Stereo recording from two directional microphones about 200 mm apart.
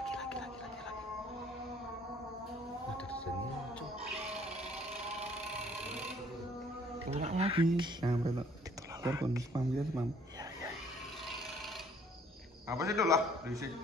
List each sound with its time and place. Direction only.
0.0 s a sound: 5° left (ahead or behind)
7.1 s a man's voice: 30° right (ahead or behind); by 10.0 s 15° right (ahead or behind)
12.6 s a man's voice: 15° right (ahead or behind)